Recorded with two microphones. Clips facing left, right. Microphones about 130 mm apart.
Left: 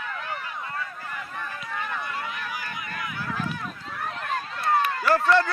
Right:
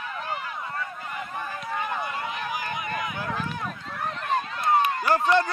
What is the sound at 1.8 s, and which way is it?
Vehicle, 20° right (ahead or behind).